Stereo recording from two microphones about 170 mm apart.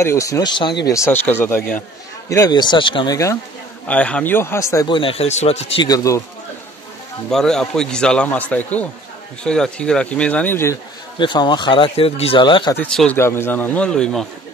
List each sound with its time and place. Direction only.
0.0 s a man's voice: 15° left (ahead or behind)
3.8 s a man's voice: 5° left (ahead or behind)
4.9 s speech: 35° left (ahead or behind)
5.8 s speech: 20° left (ahead or behind)
7.2 s a man's voice: 5° left (ahead or behind)
11.1 s speech: 25° left (ahead or behind)
12.7 s a man's voice: 5° left (ahead or behind)